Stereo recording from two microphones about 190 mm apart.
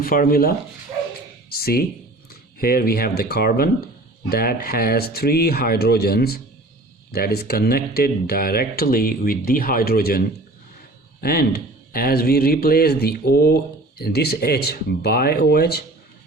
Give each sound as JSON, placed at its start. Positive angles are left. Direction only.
{"t": 0.0, "sound": "speech", "side_deg": 50}
{"t": 1.5, "sound": "a sound", "side_deg": 55}
{"t": 2.6, "sound": "speech", "side_deg": 55}